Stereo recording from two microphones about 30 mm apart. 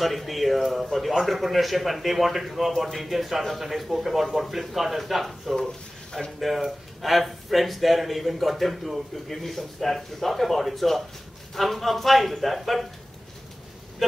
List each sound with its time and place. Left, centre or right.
0.0 s a man's voice: centre